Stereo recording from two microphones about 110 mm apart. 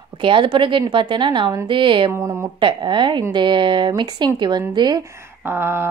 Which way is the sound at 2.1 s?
25° right (ahead or behind).